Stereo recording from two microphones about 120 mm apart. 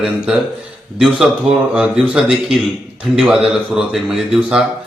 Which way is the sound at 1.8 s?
10° right (ahead or behind).